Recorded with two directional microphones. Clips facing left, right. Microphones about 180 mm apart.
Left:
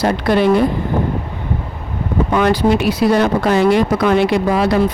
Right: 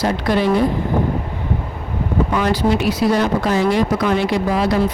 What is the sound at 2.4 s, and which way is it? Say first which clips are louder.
A woman's voice: left 5 dB; 60° left (ahead or behind).